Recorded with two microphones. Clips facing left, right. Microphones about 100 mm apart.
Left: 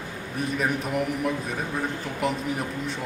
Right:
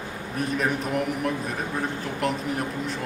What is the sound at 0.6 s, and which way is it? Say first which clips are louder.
A man's voice: even; centre (ahead or behind).